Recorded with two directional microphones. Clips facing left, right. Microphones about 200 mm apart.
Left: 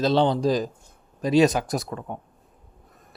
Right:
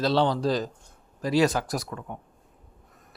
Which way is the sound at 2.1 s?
35° left (ahead or behind).